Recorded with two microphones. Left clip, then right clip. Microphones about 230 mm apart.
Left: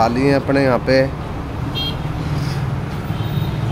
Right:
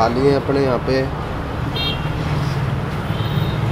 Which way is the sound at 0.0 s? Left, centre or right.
Left.